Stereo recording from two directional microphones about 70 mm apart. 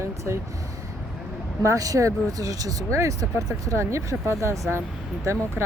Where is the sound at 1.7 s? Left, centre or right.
Right.